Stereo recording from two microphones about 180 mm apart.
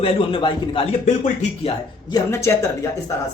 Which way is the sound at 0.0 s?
30° left (ahead or behind).